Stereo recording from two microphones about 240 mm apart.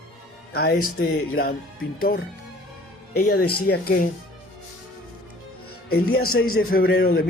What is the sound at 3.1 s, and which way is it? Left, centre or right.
Speech, left.